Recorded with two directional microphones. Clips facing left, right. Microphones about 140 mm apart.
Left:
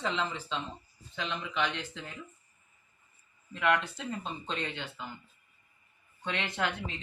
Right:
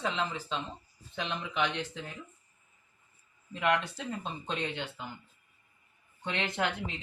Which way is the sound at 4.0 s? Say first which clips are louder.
Even; 15° right (ahead or behind).